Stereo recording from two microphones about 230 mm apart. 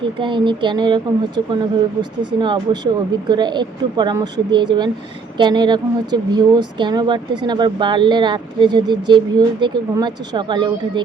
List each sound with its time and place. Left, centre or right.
0.0 s speech: right